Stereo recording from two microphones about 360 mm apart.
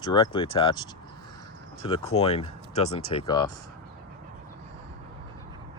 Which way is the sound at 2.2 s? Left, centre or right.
Centre.